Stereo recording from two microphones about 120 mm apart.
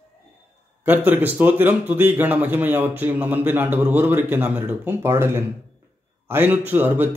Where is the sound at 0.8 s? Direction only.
15° right (ahead or behind).